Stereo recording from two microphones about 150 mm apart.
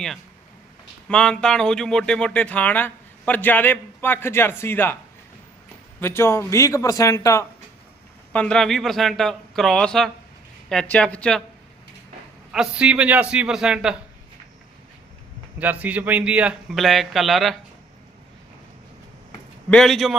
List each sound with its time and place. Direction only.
1.0 s speech: 5° left (ahead or behind)
6.0 s a man's voice: 15° left (ahead or behind)
8.3 s speech: 10° left (ahead or behind)
12.5 s a man's voice: 5° right (ahead or behind)
15.5 s a man's voice: 10° right (ahead or behind)
19.7 s speech: centre (ahead or behind)